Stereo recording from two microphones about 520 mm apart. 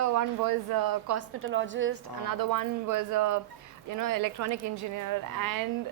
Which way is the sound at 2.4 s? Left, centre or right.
Right.